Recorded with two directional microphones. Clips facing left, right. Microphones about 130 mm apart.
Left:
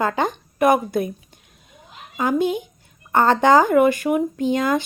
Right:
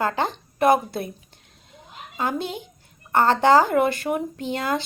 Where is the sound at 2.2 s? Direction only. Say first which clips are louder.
Left 7 dB; 15° left (ahead or behind).